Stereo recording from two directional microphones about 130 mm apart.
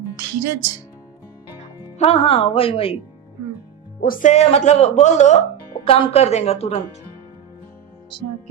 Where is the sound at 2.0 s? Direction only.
50° left (ahead or behind).